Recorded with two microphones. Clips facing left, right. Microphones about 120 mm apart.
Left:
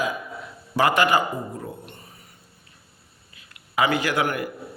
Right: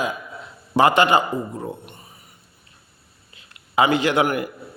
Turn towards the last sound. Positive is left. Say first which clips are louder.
# right 4 dB
turn(degrees=-20)  # may be behind; listen again after turning